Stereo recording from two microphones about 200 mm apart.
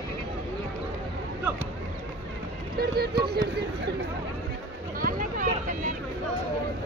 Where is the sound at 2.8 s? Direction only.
50° right (ahead or behind).